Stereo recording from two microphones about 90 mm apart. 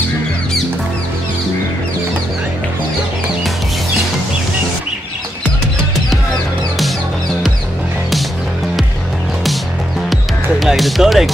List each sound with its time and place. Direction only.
10.6 s music: centre (ahead or behind)